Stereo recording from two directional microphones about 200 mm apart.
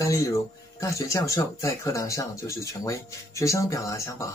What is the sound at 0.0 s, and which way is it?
Speech, 15° left (ahead or behind).